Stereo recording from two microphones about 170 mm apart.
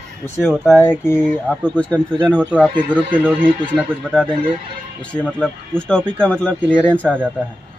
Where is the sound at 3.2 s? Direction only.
10° right (ahead or behind).